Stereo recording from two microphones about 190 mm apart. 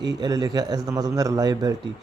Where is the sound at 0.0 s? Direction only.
20° right (ahead or behind).